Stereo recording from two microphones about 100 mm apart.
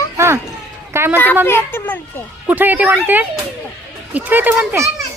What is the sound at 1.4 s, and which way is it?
Speech, 25° left (ahead or behind).